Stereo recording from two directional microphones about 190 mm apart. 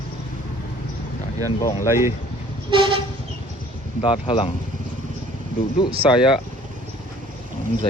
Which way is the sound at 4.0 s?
25° left (ahead or behind).